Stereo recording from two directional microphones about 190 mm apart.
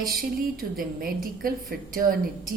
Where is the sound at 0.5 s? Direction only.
50° right (ahead or behind).